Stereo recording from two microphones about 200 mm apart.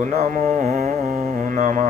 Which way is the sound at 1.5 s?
40° right (ahead or behind).